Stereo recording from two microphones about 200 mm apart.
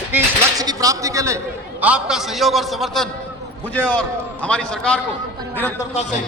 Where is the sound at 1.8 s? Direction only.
5° right (ahead or behind).